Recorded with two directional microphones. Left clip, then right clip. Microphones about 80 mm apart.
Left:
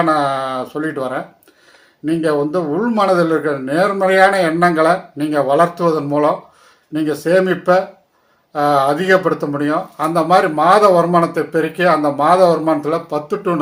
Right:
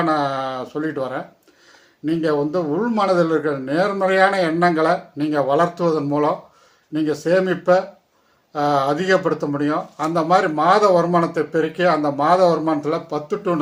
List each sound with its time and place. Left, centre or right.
0.0 s speech: right